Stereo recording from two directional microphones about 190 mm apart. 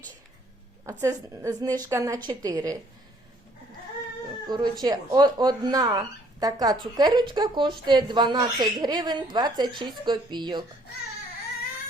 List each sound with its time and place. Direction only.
0.9 s a woman's voice: 15° right (ahead or behind)
4.4 s speech: 20° right (ahead or behind)